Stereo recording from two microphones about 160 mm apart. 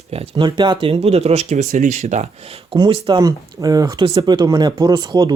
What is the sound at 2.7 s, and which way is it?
Speech, 30° right (ahead or behind).